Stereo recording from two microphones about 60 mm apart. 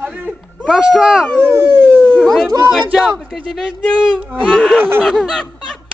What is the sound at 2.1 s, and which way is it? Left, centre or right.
Speech, centre.